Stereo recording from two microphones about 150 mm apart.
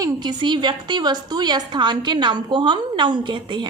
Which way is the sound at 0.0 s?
30° right (ahead or behind).